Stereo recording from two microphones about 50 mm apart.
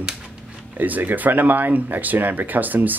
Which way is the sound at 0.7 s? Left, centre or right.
Right.